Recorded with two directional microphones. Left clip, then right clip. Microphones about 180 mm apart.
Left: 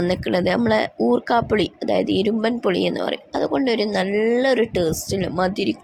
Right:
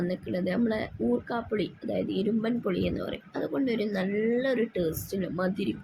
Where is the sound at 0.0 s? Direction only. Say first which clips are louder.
Left 11 dB; 65° left (ahead or behind).